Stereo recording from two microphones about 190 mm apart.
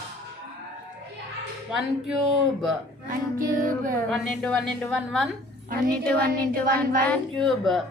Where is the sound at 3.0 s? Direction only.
45° right (ahead or behind).